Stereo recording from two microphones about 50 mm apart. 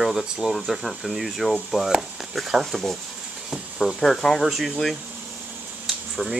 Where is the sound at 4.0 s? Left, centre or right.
Centre.